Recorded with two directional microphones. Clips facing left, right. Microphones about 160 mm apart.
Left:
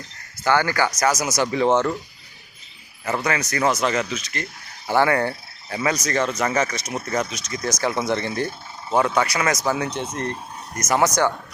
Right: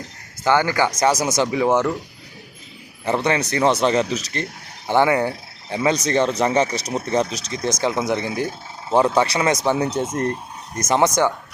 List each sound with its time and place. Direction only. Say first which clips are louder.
0.4 s speech: right 2 dB; 20° right (ahead or behind)
3.0 s speech: right 4 dB; 30° right (ahead or behind)
4.9 s speech: right 2 dB; 20° right (ahead or behind)
8.9 s speech: right 3 dB; 30° right (ahead or behind); by 10.3 s 45° right (ahead or behind)
10.8 s speech: right 2 dB; 25° right (ahead or behind)